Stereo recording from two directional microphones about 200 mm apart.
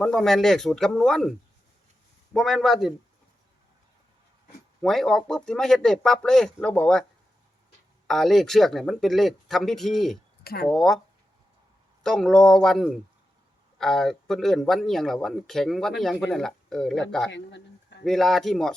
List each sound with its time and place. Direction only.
0.0 s speech: centre (ahead or behind)
2.3 s speech: centre (ahead or behind)
4.8 s speech: centre (ahead or behind)
8.0 s speech: centre (ahead or behind)
10.4 s speech: 50° left (ahead or behind)
10.7 s speech: centre (ahead or behind)
12.0 s speech: centre (ahead or behind)
17.3 s a sound: 60° left (ahead or behind)
18.0 s speech: centre (ahead or behind)